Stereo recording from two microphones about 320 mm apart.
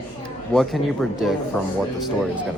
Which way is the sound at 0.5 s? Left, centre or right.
Centre.